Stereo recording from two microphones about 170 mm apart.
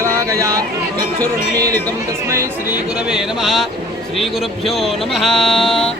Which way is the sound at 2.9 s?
5° right (ahead or behind).